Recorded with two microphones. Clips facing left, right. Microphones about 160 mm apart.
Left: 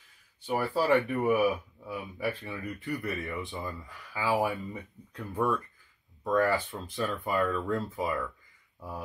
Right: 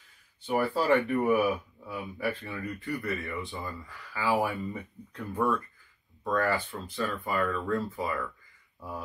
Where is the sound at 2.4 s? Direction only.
15° left (ahead or behind).